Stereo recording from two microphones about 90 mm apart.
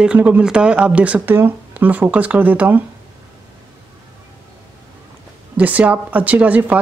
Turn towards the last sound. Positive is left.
turn(degrees=-15)  # may be behind; listen again after turning